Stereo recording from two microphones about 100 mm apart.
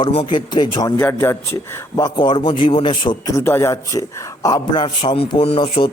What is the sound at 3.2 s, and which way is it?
Speech, 30° left (ahead or behind).